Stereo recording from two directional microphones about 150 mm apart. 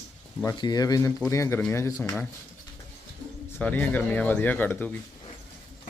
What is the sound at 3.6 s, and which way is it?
Speech, 10° left (ahead or behind).